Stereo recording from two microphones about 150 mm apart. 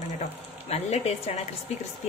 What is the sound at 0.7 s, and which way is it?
Speech, 45° left (ahead or behind).